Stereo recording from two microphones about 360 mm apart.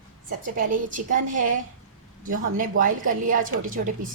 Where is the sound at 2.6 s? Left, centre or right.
Right.